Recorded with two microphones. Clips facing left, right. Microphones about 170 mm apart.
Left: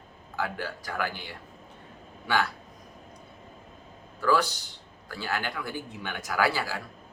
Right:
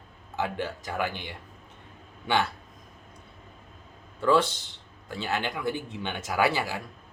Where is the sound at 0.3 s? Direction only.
20° right (ahead or behind).